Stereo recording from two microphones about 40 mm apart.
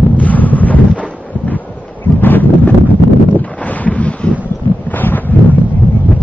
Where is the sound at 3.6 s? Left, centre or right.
Left.